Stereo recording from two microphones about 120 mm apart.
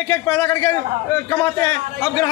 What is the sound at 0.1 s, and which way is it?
A man's voice, 15° left (ahead or behind).